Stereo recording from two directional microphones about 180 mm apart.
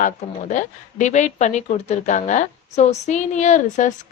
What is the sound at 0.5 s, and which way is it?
Speech, 45° left (ahead or behind).